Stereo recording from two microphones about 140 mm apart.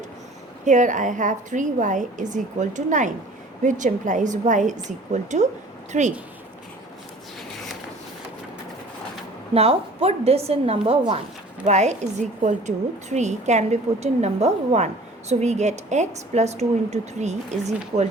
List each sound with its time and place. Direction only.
0.6 s a woman's voice: 60° right (ahead or behind)
9.6 s a woman's voice: 45° right (ahead or behind)